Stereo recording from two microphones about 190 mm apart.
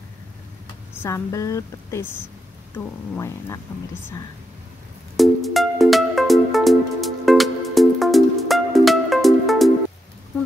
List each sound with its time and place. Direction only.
1.0 s speech: 15° left (ahead or behind)
5.1 s music: centre (ahead or behind)